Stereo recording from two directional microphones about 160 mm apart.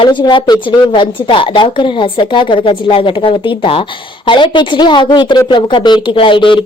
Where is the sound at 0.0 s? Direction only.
30° left (ahead or behind).